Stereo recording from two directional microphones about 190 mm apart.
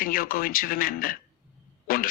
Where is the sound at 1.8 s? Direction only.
50° left (ahead or behind).